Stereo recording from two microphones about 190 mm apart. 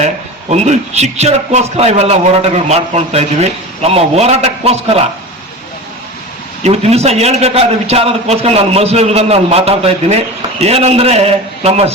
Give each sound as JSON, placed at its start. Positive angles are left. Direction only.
{"t": 0.5, "sound": "a man's voice", "side_deg": -35}
{"t": 6.7, "sound": "a man's voice", "side_deg": -35}